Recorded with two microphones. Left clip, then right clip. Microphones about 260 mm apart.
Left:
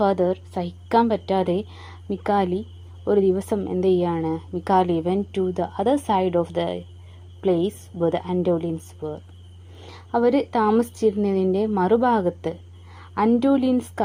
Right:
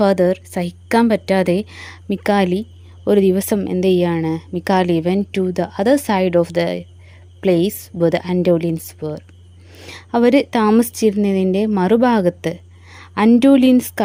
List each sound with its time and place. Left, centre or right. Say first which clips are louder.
0.0 s a woman's voice: right 6 dB; right